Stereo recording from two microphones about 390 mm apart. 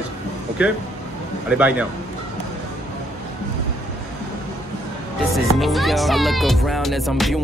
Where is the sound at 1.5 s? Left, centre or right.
Centre.